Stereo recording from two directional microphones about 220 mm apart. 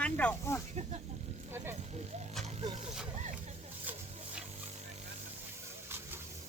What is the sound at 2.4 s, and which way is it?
Music, 30° right (ahead or behind).